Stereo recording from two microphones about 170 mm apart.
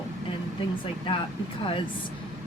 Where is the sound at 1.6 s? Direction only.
30° left (ahead or behind).